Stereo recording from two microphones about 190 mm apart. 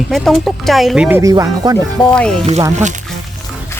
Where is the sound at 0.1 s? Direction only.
Centre (ahead or behind).